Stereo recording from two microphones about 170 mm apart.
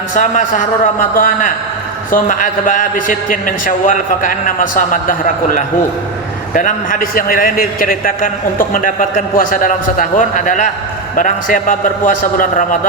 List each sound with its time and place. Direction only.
0.1 s a man's voice: 50° left (ahead or behind)